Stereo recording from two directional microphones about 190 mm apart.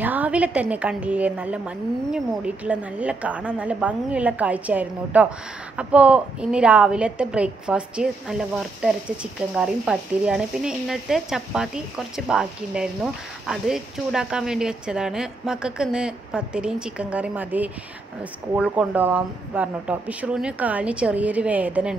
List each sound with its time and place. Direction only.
0.0 s a woman's voice: 10° right (ahead or behind)